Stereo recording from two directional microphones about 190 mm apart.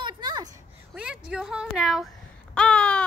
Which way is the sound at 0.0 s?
25° right (ahead or behind).